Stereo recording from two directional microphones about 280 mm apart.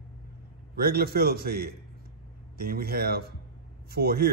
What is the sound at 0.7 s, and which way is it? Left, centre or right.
A man's voice, right.